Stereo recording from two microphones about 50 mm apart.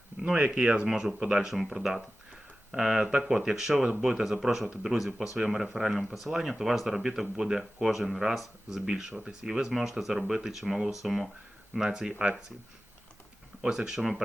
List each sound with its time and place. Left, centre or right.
0.3 s speech: right
0.9 s speech: centre
13.6 s speech: centre